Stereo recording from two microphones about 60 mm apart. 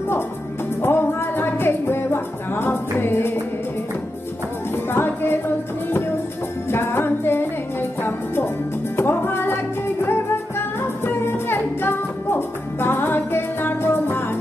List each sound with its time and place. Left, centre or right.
0.8 s music: left
4.9 s music: left
6.7 s music: left
8.9 s music: left